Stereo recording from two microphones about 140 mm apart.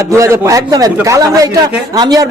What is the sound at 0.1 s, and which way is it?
Speech, 20° right (ahead or behind).